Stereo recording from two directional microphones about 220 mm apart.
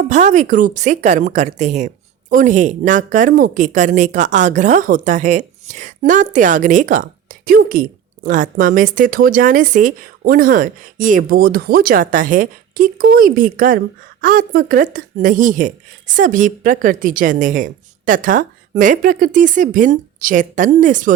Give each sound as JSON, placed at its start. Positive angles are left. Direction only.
{"t": 0.1, "sound": "speech", "side_deg": -30}